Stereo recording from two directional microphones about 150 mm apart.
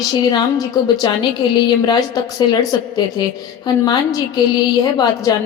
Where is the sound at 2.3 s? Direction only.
25° left (ahead or behind).